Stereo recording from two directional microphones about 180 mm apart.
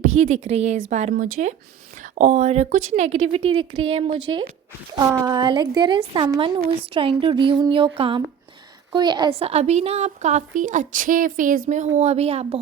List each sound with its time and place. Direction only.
0.2 s a woman's voice: 40° right (ahead or behind)
4.9 s a woman's voice: 20° right (ahead or behind)
9.4 s a woman's voice: 35° right (ahead or behind)